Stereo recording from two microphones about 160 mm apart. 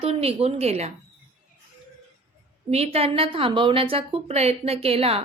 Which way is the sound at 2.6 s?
40° right (ahead or behind).